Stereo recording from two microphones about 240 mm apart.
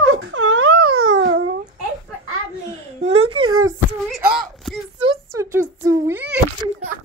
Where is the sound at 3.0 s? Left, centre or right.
Right.